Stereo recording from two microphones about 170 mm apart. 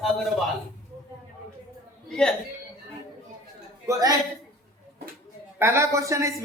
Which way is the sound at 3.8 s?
20° right (ahead or behind).